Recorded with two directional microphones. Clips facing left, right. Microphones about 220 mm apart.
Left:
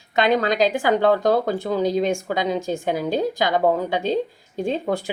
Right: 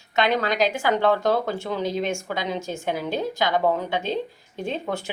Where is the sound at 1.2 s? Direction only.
45° left (ahead or behind).